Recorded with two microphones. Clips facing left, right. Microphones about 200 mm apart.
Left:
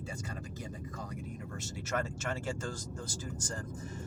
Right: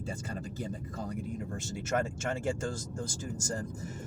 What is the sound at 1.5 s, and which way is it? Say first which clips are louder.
Speech: right 4 dB; 30° right (ahead or behind).